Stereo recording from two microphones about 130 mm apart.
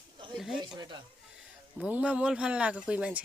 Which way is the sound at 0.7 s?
35° right (ahead or behind).